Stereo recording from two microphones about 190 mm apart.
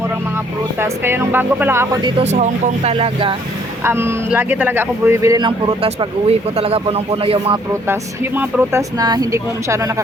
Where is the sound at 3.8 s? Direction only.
15° right (ahead or behind); by 7.6 s 30° right (ahead or behind).